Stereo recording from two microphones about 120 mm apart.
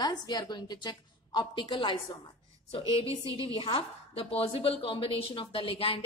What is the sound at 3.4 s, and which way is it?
A woman's voice, 50° left (ahead or behind).